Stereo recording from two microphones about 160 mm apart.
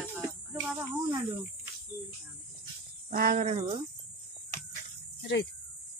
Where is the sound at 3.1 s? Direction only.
65° right (ahead or behind).